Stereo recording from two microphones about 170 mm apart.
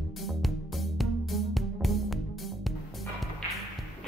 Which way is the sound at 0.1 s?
Centre (ahead or behind).